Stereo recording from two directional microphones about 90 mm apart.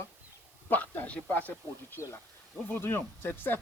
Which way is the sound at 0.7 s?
20° left (ahead or behind).